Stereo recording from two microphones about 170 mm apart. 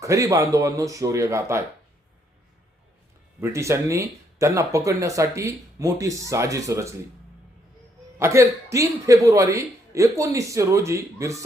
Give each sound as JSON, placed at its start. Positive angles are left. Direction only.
{"t": 0.0, "sound": "speech", "side_deg": -20}
{"t": 3.4, "sound": "speech", "side_deg": -15}
{"t": 8.2, "sound": "speech", "side_deg": -15}